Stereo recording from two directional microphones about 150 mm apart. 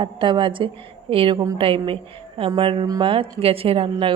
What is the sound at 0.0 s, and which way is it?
A woman's voice, 35° right (ahead or behind).